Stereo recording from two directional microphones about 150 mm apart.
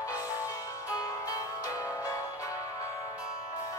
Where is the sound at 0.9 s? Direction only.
20° left (ahead or behind).